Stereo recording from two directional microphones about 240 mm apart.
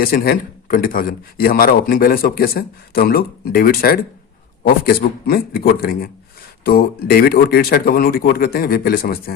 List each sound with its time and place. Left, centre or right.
0.0 s a man's voice: left